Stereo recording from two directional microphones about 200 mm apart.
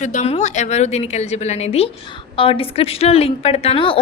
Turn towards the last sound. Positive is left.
turn(degrees=25)  # may be behind; listen again after turning